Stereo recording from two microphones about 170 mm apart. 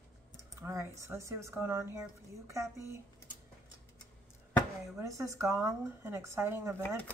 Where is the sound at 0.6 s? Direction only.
15° right (ahead or behind).